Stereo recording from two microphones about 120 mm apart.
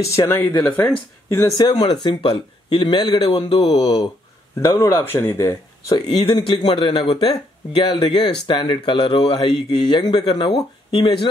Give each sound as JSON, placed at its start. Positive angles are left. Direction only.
{"t": 0.0, "sound": "speech", "side_deg": 25}
{"t": 1.6, "sound": "speech", "side_deg": 35}
{"t": 4.6, "sound": "speech", "side_deg": 25}
{"t": 5.9, "sound": "speech", "side_deg": 35}
{"t": 10.0, "sound": "speech", "side_deg": 35}
{"t": 10.9, "sound": "speech", "side_deg": 50}